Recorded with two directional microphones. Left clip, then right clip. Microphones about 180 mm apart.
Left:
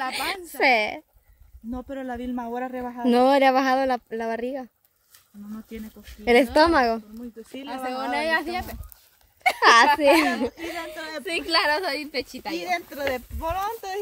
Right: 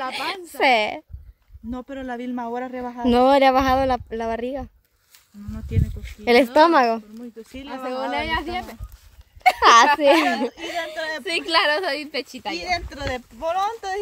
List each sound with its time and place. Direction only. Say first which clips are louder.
0.1 s speech: right 1 dB; centre (ahead or behind)
1.7 s a man's voice: right 1 dB; 20° right (ahead or behind)
5.5 s a man's voice: right 6 dB; 20° right (ahead or behind)
6.2 s speech: right 3 dB; 5° right (ahead or behind)
7.6 s speech: right 2 dB; 30° left (ahead or behind)
9.6 s a woman's voice: right 2 dB; 5° right (ahead or behind)
10.5 s a woman's voice: right 5 dB; 35° right (ahead or behind)
11.5 s a woman's voice: right 3 dB; 25° right (ahead or behind)